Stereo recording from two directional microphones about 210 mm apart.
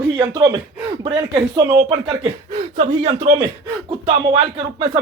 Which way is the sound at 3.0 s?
30° right (ahead or behind).